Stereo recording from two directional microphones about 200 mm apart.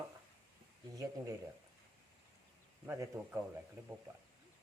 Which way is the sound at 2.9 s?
10° right (ahead or behind).